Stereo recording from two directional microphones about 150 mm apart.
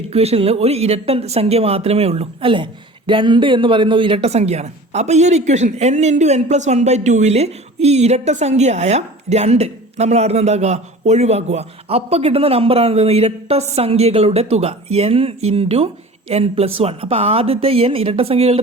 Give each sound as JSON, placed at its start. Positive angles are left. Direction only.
{"t": 0.1, "sound": "speech", "side_deg": -45}